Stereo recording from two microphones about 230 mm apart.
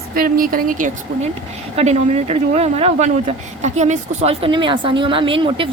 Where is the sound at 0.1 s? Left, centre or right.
Right.